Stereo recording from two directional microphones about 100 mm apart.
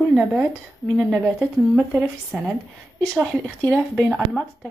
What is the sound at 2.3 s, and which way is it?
Speech, 10° right (ahead or behind).